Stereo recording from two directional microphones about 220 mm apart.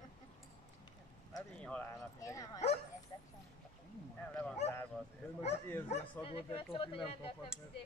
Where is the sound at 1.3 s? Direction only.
5° left (ahead or behind).